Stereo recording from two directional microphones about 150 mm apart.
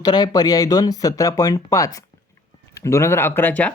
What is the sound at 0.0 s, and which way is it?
Speech, 25° left (ahead or behind).